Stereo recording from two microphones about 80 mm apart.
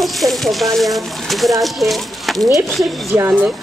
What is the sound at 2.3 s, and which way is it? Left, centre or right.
Speech, right.